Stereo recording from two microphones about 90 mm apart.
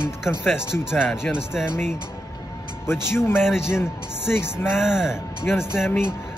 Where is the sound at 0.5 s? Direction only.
10° right (ahead or behind).